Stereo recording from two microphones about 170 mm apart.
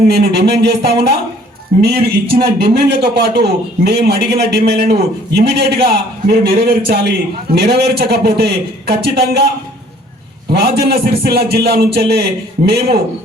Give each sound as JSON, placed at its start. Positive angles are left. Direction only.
{"t": 0.1, "sound": "a man's voice", "side_deg": -70}
{"t": 1.8, "sound": "a man's voice", "side_deg": -60}
{"t": 10.5, "sound": "a man's voice", "side_deg": -70}